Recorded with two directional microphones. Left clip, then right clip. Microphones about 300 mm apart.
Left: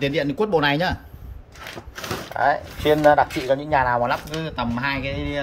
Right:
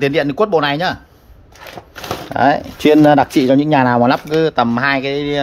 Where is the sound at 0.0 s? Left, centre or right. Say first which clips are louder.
Right 7 dB; centre.